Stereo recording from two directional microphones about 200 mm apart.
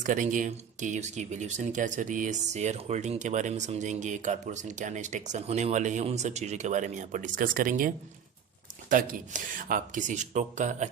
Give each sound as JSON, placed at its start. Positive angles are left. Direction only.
{"t": 0.0, "sound": "speech", "side_deg": -40}